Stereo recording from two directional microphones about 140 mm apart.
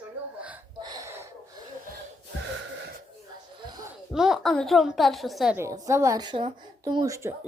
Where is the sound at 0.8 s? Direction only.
30° right (ahead or behind).